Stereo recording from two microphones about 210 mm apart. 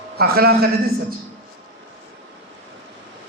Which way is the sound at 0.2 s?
50° right (ahead or behind).